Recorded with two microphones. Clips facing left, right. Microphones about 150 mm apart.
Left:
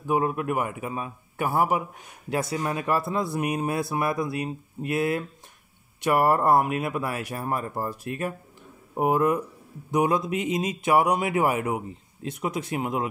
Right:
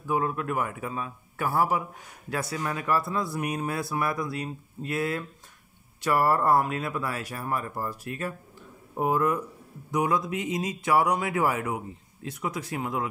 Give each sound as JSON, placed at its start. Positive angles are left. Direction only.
{"t": 0.0, "sound": "a man's voice", "side_deg": 20}